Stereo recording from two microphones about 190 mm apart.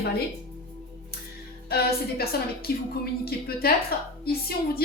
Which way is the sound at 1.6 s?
55° left (ahead or behind).